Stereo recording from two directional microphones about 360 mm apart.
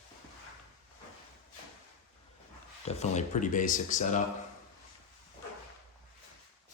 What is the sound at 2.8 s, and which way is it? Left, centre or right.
Speech, centre.